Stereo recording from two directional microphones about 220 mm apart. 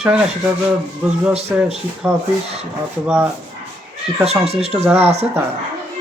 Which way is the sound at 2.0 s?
5° right (ahead or behind).